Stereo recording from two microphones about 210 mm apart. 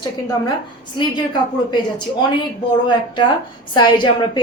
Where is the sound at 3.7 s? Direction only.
20° left (ahead or behind).